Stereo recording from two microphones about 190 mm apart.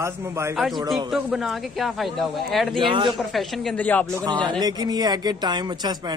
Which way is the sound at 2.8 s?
25° right (ahead or behind).